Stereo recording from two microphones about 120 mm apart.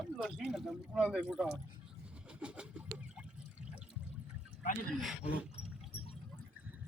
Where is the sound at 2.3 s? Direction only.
10° right (ahead or behind).